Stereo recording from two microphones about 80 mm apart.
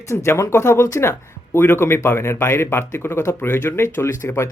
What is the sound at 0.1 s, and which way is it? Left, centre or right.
Speech, left.